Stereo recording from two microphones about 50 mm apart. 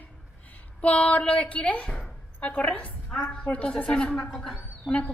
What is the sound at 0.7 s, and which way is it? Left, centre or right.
A woman's voice, left.